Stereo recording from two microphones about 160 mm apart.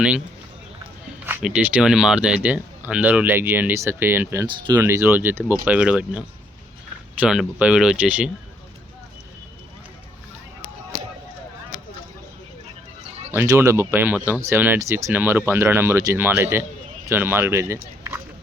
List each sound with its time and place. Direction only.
1.2 s speech: 10° right (ahead or behind)
4.4 s speech: 30° right (ahead or behind)
4.8 s speech: 15° right (ahead or behind)
13.3 s speech: 15° right (ahead or behind)